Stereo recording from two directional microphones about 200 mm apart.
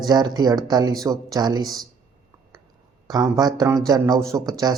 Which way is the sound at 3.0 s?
20° right (ahead or behind).